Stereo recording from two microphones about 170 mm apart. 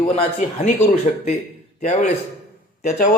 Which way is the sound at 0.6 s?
45° left (ahead or behind).